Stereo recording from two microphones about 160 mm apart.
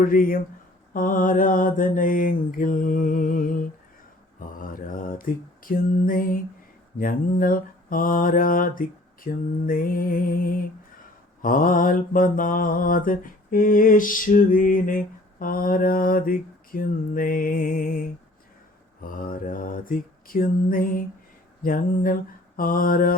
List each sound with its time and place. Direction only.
0.0 s mantra: 60° left (ahead or behind)
19.0 s mantra: 60° left (ahead or behind)